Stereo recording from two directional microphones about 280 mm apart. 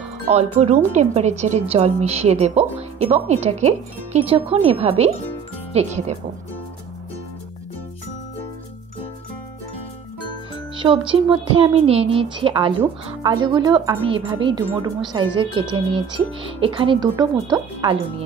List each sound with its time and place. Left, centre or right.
0.2 s speech: right
10.8 s speech: centre